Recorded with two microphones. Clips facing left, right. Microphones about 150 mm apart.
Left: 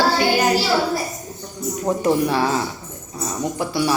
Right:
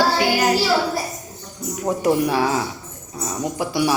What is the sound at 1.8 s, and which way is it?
A woman's voice, 10° right (ahead or behind).